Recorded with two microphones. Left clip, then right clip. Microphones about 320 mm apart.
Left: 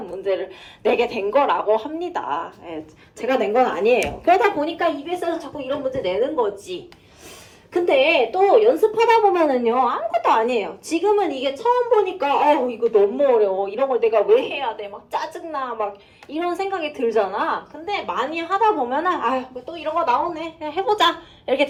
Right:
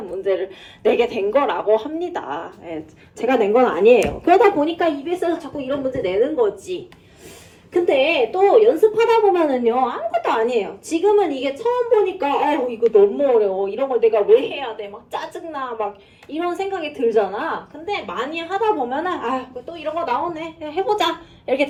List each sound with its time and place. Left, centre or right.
0.2 s a woman's voice: centre
4.0 s a woman's voice: centre